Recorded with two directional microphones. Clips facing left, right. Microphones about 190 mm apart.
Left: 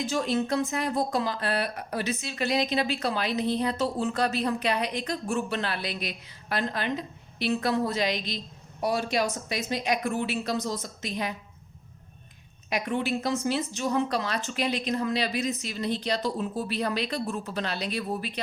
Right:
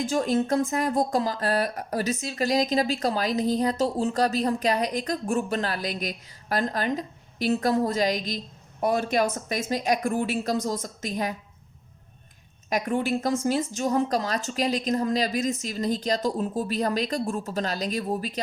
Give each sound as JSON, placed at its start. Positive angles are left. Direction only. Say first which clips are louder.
{"t": 0.0, "sound": "speech", "louder": "right 3 dB", "side_deg": -50}
{"t": 12.7, "sound": "speech", "louder": "right 3 dB", "side_deg": -45}